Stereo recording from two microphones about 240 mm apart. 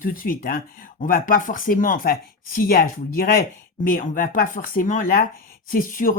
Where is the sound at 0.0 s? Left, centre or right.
Left.